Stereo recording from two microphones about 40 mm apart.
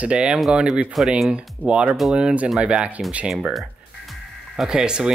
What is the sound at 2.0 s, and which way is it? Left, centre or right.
Speech, centre.